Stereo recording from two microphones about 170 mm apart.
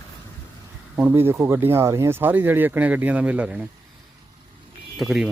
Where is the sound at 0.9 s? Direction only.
10° right (ahead or behind).